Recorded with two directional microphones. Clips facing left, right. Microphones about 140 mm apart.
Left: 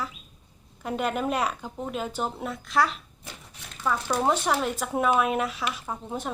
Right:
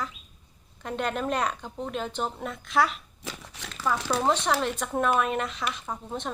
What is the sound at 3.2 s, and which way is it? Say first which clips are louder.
Crumpling: right 5 dB; 90° right.